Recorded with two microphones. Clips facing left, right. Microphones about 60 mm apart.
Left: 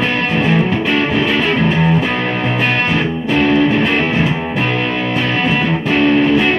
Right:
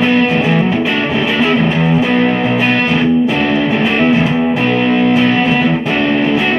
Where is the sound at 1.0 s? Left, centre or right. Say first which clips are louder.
Right 1 dB; centre.